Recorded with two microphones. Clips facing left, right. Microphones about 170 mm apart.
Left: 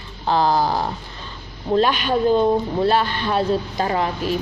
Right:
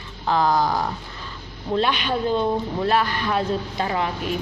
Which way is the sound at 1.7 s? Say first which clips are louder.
Left 4 dB; 45° left (ahead or behind).